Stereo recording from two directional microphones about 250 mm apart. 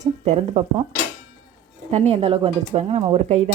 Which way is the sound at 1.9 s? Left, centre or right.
Right.